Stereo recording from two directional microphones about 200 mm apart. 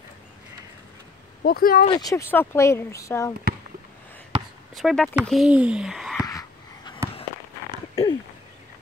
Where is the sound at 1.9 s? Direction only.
15° left (ahead or behind).